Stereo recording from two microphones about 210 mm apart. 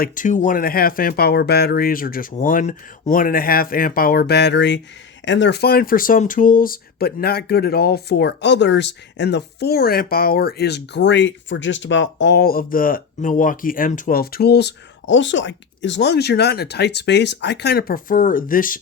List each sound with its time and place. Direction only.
0.0 s speech: 35° left (ahead or behind)